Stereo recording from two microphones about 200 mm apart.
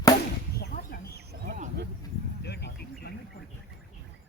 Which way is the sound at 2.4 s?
55° left (ahead or behind).